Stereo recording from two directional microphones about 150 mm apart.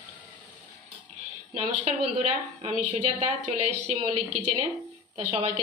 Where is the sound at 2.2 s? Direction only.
50° right (ahead or behind).